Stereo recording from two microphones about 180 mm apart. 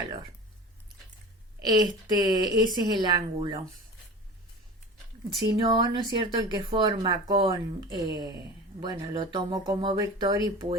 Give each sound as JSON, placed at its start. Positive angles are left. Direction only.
{"t": 1.6, "sound": "speech", "side_deg": -20}
{"t": 5.5, "sound": "speech", "side_deg": -30}